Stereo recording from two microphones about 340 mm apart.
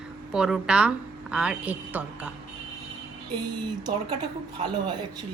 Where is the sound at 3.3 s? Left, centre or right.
Centre.